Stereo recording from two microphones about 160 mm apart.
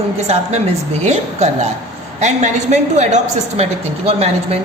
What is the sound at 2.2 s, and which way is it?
A woman's voice, 45° right (ahead or behind).